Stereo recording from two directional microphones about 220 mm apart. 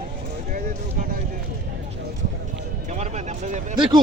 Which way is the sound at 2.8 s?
30° right (ahead or behind).